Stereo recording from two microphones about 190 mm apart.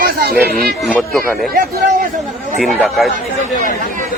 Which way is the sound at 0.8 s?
5° left (ahead or behind).